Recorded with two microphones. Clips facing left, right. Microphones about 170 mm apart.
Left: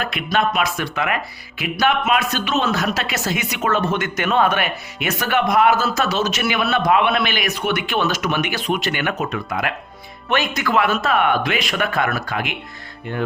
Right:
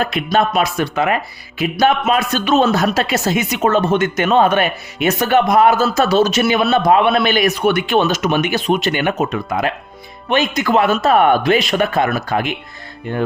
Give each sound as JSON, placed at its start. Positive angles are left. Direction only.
{"t": 0.0, "sound": "speech", "side_deg": -30}
{"t": 7.9, "sound": "speech", "side_deg": -20}
{"t": 10.2, "sound": "speech", "side_deg": -20}